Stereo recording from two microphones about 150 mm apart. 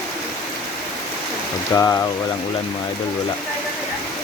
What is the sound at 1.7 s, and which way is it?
Speech, 20° left (ahead or behind).